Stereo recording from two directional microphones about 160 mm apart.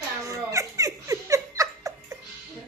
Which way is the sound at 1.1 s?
20° right (ahead or behind).